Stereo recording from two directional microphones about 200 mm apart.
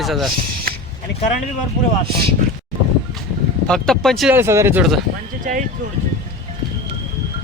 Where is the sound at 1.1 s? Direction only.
65° left (ahead or behind).